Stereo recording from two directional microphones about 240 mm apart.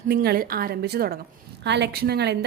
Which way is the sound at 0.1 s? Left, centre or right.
Right.